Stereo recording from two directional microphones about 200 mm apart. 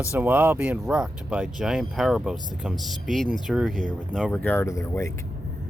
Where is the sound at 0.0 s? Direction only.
10° right (ahead or behind).